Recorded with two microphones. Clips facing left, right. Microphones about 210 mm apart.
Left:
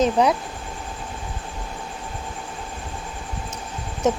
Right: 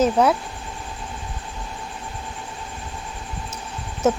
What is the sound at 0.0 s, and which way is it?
Speech, 5° right (ahead or behind).